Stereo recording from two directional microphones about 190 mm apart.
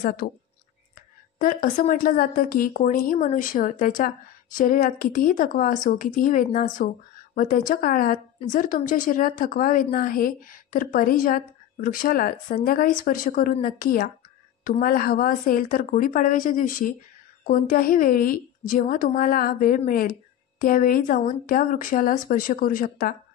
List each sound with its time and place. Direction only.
0.0 s a woman's voice: 50° left (ahead or behind)